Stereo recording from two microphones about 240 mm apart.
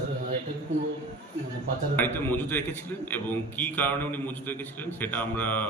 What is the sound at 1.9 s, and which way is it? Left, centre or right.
A man's voice, centre.